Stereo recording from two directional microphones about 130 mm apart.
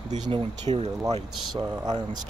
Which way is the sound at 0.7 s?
45° right (ahead or behind).